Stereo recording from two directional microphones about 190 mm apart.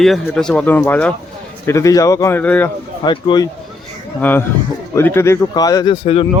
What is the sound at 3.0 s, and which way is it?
Speech, 25° left (ahead or behind).